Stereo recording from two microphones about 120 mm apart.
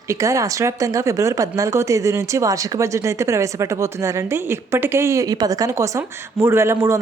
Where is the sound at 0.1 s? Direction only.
25° right (ahead or behind).